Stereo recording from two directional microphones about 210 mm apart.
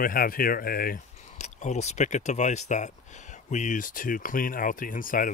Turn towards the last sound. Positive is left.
turn(degrees=40)  # may be behind; listen again after turning